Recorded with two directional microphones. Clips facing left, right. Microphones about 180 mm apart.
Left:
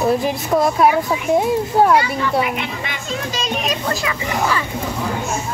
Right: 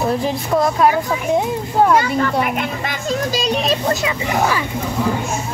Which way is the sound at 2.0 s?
50° right (ahead or behind).